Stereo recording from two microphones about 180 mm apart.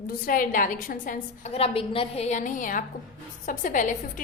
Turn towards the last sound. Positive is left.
turn(degrees=45)  # may be behind; listen again after turning